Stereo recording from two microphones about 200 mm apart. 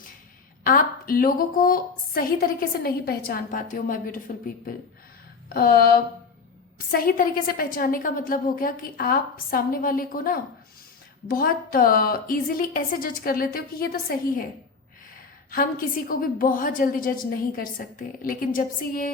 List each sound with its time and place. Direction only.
0.6 s a woman's voice: 45° left (ahead or behind)
15.4 s a woman's voice: 45° left (ahead or behind)